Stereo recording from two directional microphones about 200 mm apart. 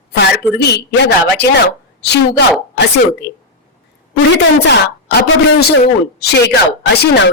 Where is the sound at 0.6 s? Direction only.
55° left (ahead or behind).